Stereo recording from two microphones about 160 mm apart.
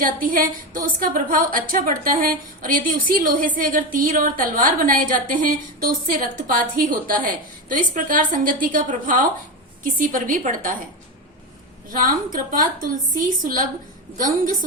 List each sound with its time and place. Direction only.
0.0 s a woman's voice: 60° right (ahead or behind)
11.9 s a woman's voice: 55° right (ahead or behind)